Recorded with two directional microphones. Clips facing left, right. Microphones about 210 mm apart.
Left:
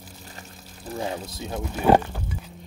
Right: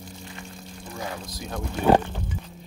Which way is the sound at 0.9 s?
25° left (ahead or behind).